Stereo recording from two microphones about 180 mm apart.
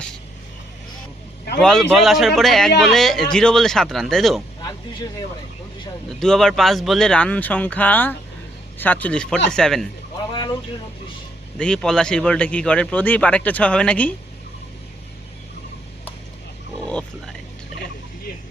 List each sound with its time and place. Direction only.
1.5 s speech: 5° left (ahead or behind)
6.1 s a man's voice: 5° left (ahead or behind)
10.3 s vehicle: 25° left (ahead or behind)
11.5 s a man's voice: 5° left (ahead or behind)
16.9 s a sound: 5° left (ahead or behind)